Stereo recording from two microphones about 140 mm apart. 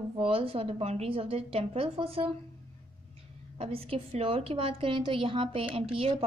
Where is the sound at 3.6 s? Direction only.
45° right (ahead or behind).